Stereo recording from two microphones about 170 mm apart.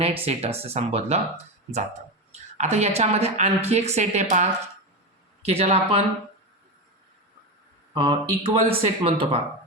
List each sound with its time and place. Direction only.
0.0 s speech: 35° right (ahead or behind)
5.5 s speech: 35° right (ahead or behind)
7.9 s speech: 30° right (ahead or behind)